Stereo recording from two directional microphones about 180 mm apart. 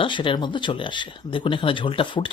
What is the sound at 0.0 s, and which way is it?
Speech, 25° left (ahead or behind).